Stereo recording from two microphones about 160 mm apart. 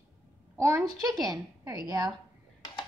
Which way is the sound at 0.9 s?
20° right (ahead or behind).